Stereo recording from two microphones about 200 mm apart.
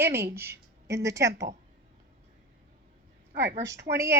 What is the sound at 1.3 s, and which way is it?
Speech, 60° right (ahead or behind).